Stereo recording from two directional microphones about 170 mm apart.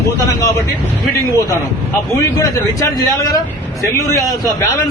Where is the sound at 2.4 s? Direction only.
20° left (ahead or behind).